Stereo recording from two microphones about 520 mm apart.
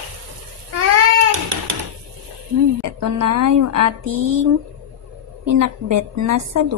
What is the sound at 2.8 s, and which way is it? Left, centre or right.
Speech, right.